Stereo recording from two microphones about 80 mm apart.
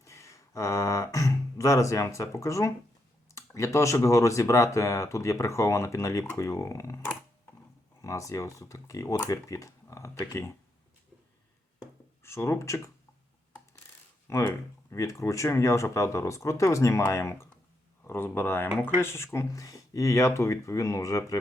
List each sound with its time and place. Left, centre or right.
0.0 s a sound: left
3.3 s speech: left
8.0 s speech: left
12.2 s speech: left
14.3 s speech: left